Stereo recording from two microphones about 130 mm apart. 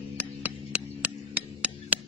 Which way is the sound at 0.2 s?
10° right (ahead or behind).